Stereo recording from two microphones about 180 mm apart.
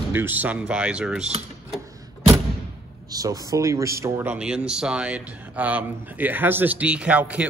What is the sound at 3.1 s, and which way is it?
Speech, 20° right (ahead or behind).